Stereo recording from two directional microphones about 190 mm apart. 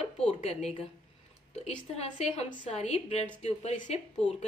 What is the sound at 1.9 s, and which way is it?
A woman's voice, 35° left (ahead or behind).